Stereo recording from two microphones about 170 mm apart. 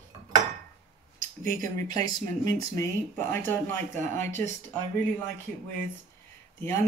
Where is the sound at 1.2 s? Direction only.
55° right (ahead or behind).